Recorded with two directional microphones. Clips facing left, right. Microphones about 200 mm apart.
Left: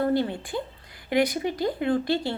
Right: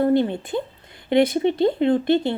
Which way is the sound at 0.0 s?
20° right (ahead or behind).